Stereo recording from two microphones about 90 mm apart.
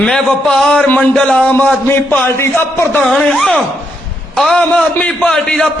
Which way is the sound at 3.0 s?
5° left (ahead or behind).